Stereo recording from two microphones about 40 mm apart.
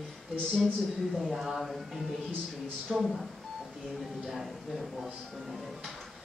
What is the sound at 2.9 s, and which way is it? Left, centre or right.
Speech, centre.